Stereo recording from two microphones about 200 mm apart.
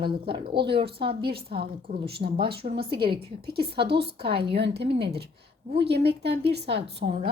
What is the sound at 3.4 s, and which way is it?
A woman's voice, 55° right (ahead or behind).